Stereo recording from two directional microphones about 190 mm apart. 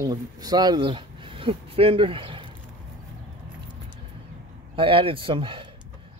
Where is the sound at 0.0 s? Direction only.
20° right (ahead or behind).